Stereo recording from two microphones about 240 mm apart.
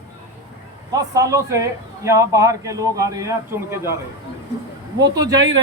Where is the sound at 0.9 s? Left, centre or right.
Centre.